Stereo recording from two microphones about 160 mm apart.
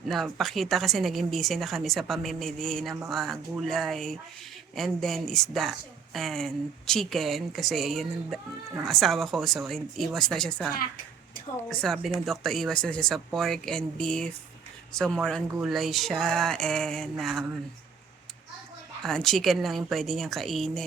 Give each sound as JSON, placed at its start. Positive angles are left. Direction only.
{"t": 0.1, "sound": "a woman's voice", "side_deg": 0}
{"t": 10.8, "sound": "speech", "side_deg": 65}
{"t": 11.7, "sound": "a woman's voice", "side_deg": 5}
{"t": 19.0, "sound": "a woman's voice", "side_deg": 0}